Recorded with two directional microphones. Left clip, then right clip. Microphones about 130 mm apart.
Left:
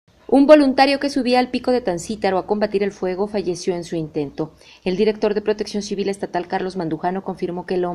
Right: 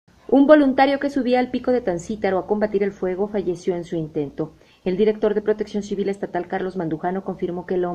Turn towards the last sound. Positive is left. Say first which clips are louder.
# left 1 dB
turn(degrees=30)  # may be behind; listen again after turning